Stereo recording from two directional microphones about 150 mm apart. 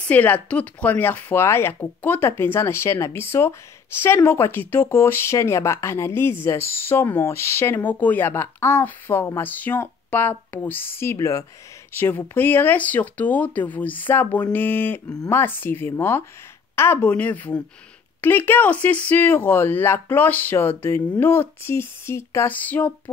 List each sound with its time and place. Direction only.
0.1 s speech: 10° left (ahead or behind)